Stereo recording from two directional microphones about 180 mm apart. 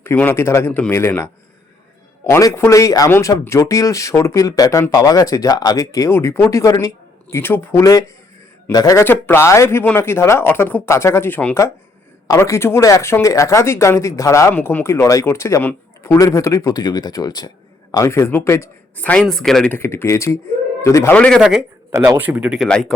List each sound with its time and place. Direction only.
0.0 s speech: 15° left (ahead or behind)
2.3 s speech: 15° left (ahead or behind); by 21.6 s centre (ahead or behind)
21.9 s speech: 15° right (ahead or behind); by 23.0 s 5° left (ahead or behind)